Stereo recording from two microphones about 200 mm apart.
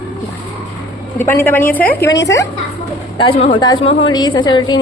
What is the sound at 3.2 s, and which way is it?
A woman's voice, 25° left (ahead or behind).